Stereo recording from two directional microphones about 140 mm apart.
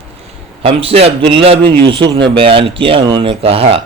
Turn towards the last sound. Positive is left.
turn(degrees=-45)  # may be behind; listen again after turning